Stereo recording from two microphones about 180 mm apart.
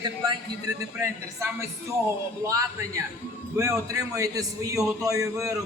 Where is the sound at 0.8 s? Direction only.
10° right (ahead or behind).